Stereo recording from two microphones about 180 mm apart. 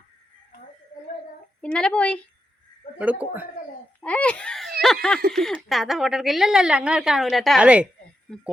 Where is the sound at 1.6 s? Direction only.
5° left (ahead or behind).